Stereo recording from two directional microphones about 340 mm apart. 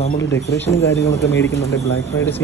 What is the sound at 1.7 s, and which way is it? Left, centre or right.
Speech, left.